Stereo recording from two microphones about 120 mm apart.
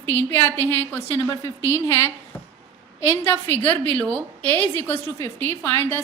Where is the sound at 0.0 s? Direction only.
15° left (ahead or behind).